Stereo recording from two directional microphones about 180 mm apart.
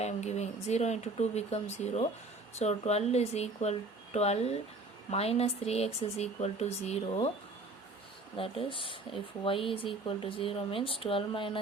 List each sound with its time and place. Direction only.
0.0 s speech: 40° left (ahead or behind)
8.4 s speech: 30° left (ahead or behind)